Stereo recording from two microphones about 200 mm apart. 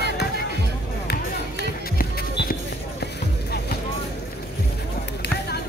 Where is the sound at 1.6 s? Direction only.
50° left (ahead or behind).